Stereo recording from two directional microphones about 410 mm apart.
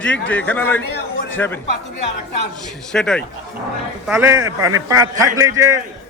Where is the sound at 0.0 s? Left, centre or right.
Centre.